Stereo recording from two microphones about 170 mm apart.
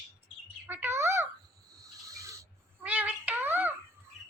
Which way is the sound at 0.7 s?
15° right (ahead or behind).